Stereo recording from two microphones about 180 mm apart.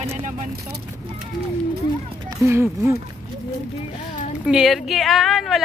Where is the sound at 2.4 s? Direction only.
15° right (ahead or behind).